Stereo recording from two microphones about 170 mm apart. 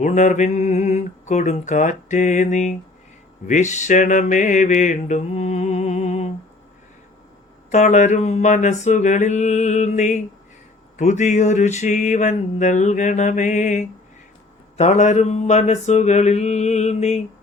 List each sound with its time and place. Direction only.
0.0 s mantra: 45° left (ahead or behind)
7.7 s mantra: 45° left (ahead or behind)